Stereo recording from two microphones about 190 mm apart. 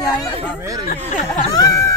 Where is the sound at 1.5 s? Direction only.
15° left (ahead or behind).